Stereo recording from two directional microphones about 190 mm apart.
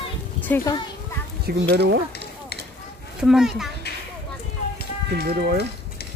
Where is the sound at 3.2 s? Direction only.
Centre (ahead or behind).